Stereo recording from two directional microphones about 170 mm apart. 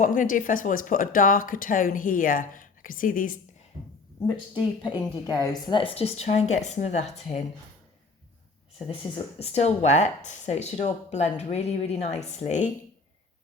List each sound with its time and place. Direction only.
0.0 s speech: 50° left (ahead or behind)
4.3 s speech: 25° left (ahead or behind); by 7.3 s 40° left (ahead or behind)
8.9 s speech: 35° left (ahead or behind)